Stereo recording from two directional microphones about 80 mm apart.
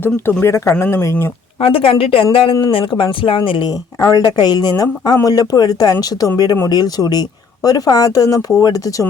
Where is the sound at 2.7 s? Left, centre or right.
Left.